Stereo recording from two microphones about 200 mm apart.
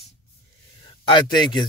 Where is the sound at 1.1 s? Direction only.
20° left (ahead or behind).